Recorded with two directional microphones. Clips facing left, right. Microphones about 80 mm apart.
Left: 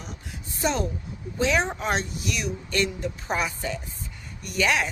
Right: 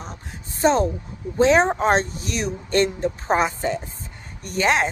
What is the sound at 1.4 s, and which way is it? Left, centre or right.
Speech, right.